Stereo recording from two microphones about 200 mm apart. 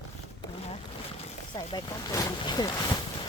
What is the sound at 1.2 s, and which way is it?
Speech, 20° left (ahead or behind).